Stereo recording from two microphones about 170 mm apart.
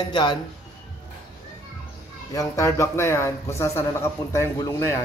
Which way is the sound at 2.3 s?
20° left (ahead or behind).